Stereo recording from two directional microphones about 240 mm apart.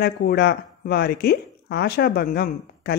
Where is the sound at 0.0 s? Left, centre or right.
Left.